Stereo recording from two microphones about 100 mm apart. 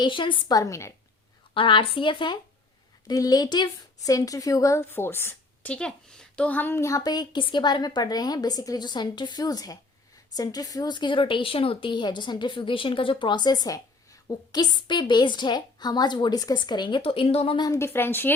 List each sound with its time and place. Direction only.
0.0 s speech: 55° left (ahead or behind)
0.5 s a woman's voice: 30° left (ahead or behind)
1.5 s speech: 60° left (ahead or behind)
3.1 s a woman's voice: 40° left (ahead or behind); by 5.7 s 25° left (ahead or behind)
5.7 s a woman's voice: 10° left (ahead or behind); by 17.0 s 50° left (ahead or behind)
17.0 s a woman's voice: 70° left (ahead or behind)
17.7 s speech: 25° left (ahead or behind)